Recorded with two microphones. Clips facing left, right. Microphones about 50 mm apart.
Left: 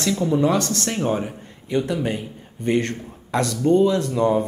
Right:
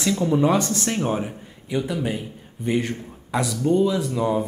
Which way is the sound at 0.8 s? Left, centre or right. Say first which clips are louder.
Left 1 dB; centre.